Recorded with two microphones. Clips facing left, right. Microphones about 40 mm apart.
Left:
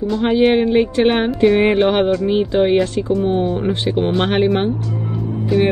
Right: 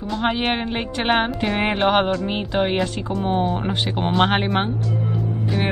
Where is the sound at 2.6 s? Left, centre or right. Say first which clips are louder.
Left 6 dB; centre.